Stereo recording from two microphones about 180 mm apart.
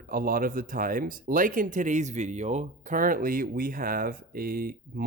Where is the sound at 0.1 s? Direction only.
50° right (ahead or behind).